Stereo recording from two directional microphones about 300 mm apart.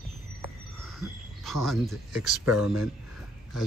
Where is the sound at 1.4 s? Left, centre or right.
Centre.